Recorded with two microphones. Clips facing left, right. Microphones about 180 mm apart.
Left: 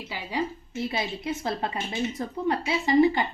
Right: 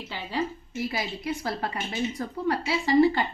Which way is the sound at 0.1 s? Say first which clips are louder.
Even; 10° left (ahead or behind).